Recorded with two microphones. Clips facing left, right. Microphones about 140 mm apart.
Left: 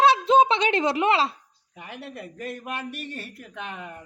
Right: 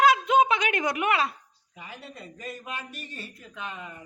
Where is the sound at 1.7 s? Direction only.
65° left (ahead or behind).